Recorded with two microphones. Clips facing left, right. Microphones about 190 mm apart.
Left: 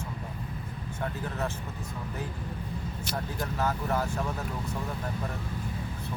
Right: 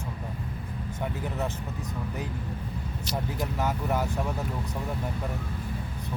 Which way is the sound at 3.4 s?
15° right (ahead or behind).